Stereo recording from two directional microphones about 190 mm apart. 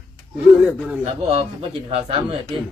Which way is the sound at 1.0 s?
35° right (ahead or behind).